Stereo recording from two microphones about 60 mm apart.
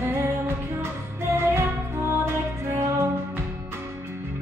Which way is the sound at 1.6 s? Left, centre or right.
Right.